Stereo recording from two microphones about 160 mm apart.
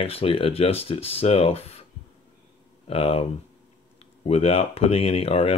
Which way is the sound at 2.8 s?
35° left (ahead or behind).